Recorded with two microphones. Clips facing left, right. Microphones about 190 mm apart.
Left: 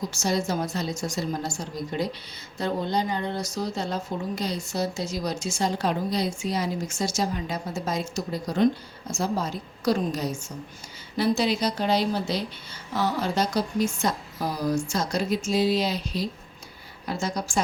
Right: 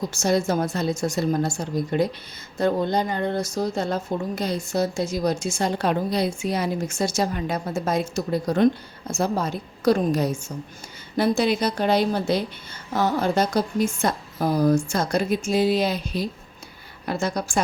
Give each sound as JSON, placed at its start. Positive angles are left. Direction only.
{"t": 0.1, "sound": "a woman's voice", "side_deg": -55}